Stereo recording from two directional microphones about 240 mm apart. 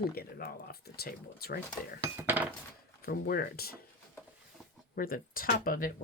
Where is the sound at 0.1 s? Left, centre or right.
Left.